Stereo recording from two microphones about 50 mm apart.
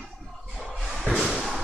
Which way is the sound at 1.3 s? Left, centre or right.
Centre.